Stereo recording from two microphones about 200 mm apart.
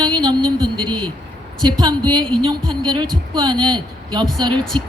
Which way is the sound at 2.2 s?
5° left (ahead or behind).